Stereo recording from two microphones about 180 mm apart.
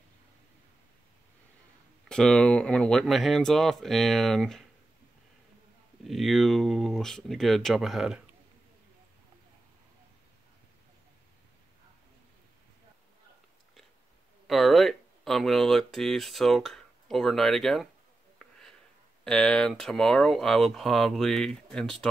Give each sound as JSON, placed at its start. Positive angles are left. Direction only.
{"t": 2.0, "sound": "speech", "side_deg": 5}
{"t": 6.0, "sound": "speech", "side_deg": 0}
{"t": 14.5, "sound": "speech", "side_deg": 0}
{"t": 18.4, "sound": "a sound", "side_deg": 0}
{"t": 19.2, "sound": "speech", "side_deg": 5}